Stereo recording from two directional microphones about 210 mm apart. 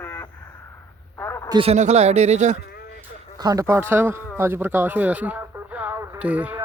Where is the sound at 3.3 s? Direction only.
15° right (ahead or behind).